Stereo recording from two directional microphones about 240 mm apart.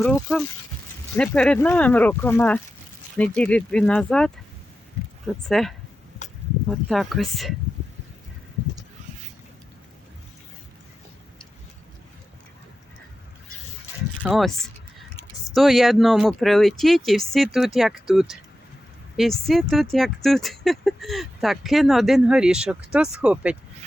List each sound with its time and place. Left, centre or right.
0.0 s speech: centre
6.2 s a sound: left
6.7 s speech: centre
14.2 s speech: centre
15.5 s speech: centre
19.5 s speech: centre